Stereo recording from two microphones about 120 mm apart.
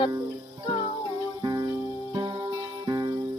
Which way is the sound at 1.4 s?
35° right (ahead or behind).